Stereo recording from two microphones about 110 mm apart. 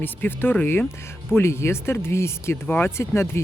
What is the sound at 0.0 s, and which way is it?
Speech, 20° left (ahead or behind).